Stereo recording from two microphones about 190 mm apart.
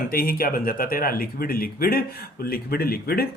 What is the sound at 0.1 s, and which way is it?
Speech, 50° left (ahead or behind).